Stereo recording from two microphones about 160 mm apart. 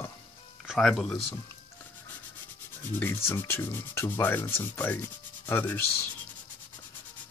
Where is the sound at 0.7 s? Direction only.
Centre (ahead or behind).